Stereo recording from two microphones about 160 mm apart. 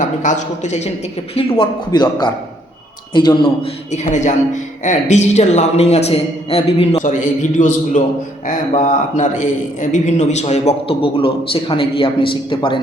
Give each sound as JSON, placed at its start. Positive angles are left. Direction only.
{"t": 0.0, "sound": "a man's voice", "side_deg": 50}
{"t": 1.4, "sound": "a man's voice", "side_deg": 35}
{"t": 3.9, "sound": "a man's voice", "side_deg": 50}